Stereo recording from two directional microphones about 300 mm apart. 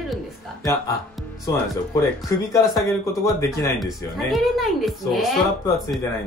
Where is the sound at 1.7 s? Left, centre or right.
Centre.